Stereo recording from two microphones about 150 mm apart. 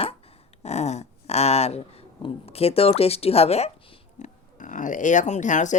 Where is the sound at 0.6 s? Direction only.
50° left (ahead or behind).